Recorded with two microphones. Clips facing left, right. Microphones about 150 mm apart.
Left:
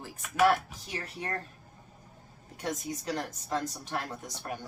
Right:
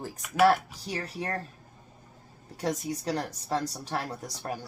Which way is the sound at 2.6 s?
35° right (ahead or behind).